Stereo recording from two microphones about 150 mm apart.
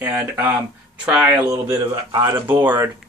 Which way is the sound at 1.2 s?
25° right (ahead or behind).